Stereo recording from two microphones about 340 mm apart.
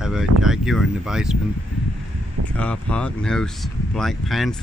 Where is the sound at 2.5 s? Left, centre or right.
Centre.